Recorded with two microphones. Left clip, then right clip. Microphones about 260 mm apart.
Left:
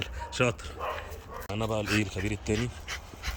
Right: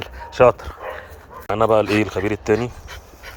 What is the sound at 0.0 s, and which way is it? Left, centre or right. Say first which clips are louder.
Dog: right 15 dB; centre.